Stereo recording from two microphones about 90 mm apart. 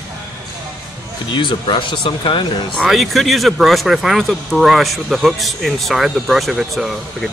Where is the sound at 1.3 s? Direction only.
65° left (ahead or behind).